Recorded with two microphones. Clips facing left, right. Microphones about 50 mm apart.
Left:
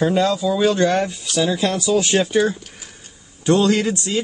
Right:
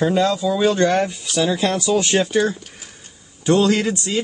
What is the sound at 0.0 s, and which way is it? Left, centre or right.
Speech, centre.